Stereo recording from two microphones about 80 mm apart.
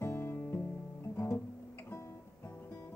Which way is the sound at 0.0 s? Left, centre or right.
Left.